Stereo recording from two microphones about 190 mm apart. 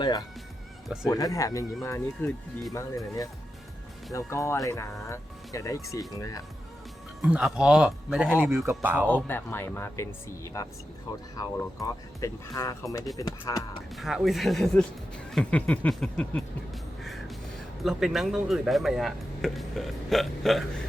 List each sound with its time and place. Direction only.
0.0 s speech: 20° left (ahead or behind)
4.1 s speech: 15° left (ahead or behind)
7.2 s speech: 5° right (ahead or behind)
9.0 s speech: 10° left (ahead or behind)
13.9 s speech: centre (ahead or behind)
17.0 s music: centre (ahead or behind)
17.8 s speech: centre (ahead or behind)